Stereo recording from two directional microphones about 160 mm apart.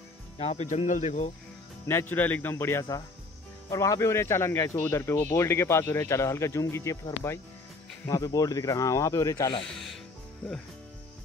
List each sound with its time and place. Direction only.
0.4 s speech: 40° left (ahead or behind)
1.9 s speech: 15° left (ahead or behind)
9.7 s music: centre (ahead or behind)